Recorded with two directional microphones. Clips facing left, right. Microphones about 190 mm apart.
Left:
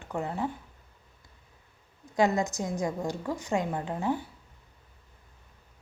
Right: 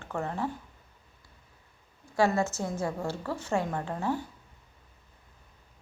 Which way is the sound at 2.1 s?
20° left (ahead or behind).